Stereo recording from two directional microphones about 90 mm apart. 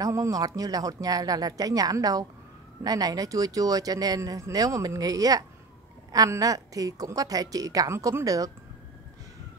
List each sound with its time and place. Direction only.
0.0 s a woman's voice: 35° right (ahead or behind)